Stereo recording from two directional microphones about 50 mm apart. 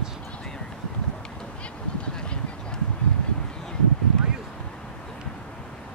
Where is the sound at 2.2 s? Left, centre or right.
Centre.